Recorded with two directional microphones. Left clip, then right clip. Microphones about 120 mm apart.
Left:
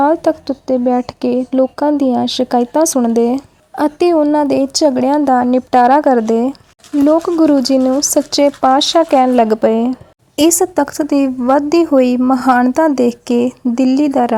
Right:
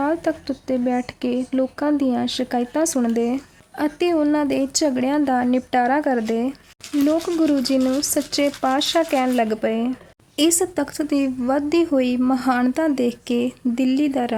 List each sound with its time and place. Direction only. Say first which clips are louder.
0.0 s speech: left 9 dB; 35° left (ahead or behind)